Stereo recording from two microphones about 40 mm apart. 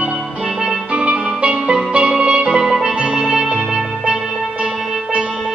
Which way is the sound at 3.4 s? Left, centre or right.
Right.